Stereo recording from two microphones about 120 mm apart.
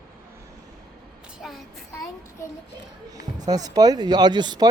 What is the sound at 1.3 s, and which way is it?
Child singing, centre (ahead or behind).